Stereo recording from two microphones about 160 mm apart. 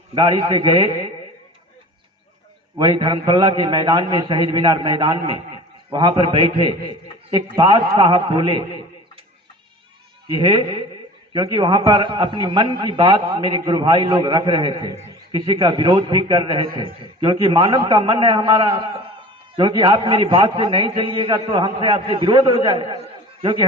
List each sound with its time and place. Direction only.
0.1 s a man's voice: 30° right (ahead or behind)
2.7 s a man's voice: 25° right (ahead or behind)
10.3 s a man's voice: 25° right (ahead or behind)